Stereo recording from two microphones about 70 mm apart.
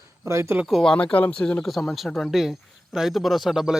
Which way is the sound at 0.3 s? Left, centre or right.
Right.